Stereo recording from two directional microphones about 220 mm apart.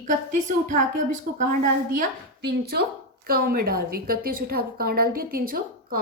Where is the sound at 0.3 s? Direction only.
35° right (ahead or behind).